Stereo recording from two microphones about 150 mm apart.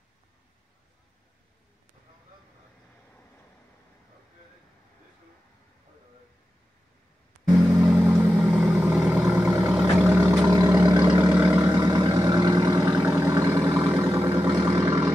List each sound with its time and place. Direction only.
7.7 s vehicle: 10° right (ahead or behind)
10.4 s vehicle: 25° right (ahead or behind)
11.2 s vehicle: 10° right (ahead or behind)
11.6 s vehicle: 25° right (ahead or behind)